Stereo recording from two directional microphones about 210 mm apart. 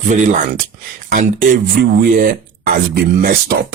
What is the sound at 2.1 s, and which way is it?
Speech, 40° right (ahead or behind).